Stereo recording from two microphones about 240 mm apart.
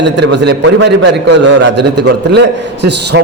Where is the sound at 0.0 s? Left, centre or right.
Right.